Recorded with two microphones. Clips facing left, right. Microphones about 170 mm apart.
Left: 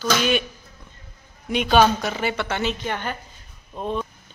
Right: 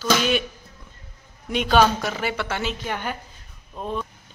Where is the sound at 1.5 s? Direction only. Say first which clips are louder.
Left 1 dB; centre (ahead or behind).